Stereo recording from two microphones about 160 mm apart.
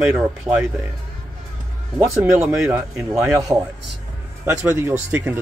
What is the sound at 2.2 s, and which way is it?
Speech, 20° right (ahead or behind).